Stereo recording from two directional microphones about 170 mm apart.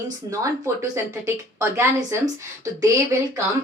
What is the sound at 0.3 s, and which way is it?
A woman's voice, 20° right (ahead or behind).